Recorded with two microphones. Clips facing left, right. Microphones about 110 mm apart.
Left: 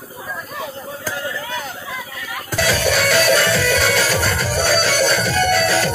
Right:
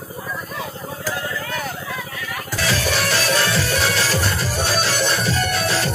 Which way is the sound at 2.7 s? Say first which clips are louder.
Left 4 dB; 55° left (ahead or behind).